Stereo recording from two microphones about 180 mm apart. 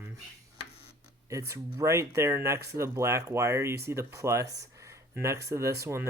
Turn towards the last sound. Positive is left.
turn(degrees=-15)  # may be behind; listen again after turning